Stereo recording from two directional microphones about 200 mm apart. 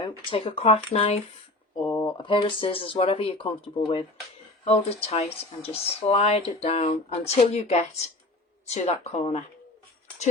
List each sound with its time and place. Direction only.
0.0 s speech: 25° left (ahead or behind)